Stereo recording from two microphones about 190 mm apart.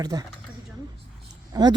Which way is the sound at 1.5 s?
20° right (ahead or behind).